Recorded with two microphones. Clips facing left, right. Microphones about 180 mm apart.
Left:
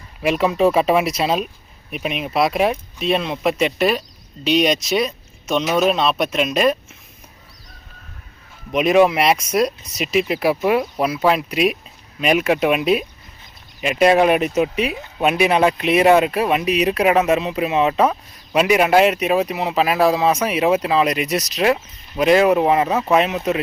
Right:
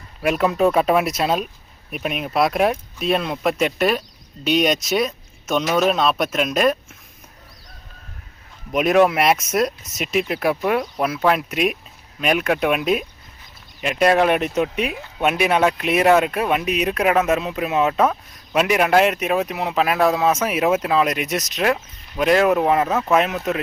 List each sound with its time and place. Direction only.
0.2 s speech: centre (ahead or behind)
8.7 s speech: centre (ahead or behind)